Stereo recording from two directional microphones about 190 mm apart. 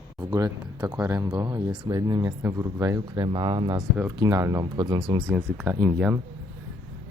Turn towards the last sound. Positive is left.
turn(degrees=-10)  # may be behind; listen again after turning